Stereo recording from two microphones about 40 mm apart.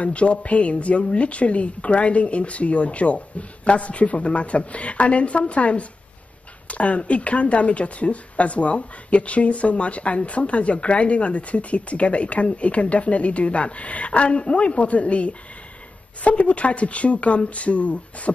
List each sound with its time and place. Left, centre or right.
0.0 s speech: left